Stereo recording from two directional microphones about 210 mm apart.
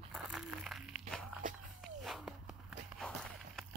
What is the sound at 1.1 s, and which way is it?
Walk, centre (ahead or behind).